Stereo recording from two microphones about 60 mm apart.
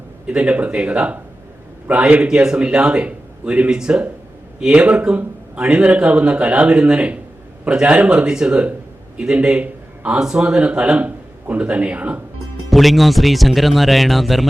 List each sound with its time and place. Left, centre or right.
0.3 s a man's voice: right
2.2 s a man's voice: centre
12.7 s speech: centre